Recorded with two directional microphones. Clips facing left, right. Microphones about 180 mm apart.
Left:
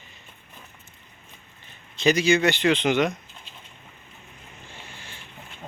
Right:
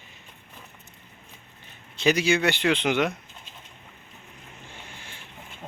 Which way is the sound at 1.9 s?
10° right (ahead or behind).